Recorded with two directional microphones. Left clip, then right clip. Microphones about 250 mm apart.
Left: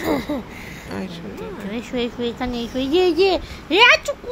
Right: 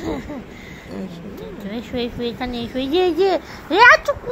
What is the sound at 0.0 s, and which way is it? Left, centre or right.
Speech, left.